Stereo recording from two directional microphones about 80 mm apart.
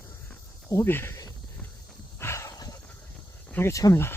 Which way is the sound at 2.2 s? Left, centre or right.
Left.